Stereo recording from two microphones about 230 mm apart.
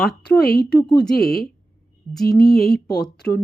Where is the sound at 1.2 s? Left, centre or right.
Left.